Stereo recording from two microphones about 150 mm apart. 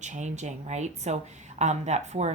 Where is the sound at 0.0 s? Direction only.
50° right (ahead or behind).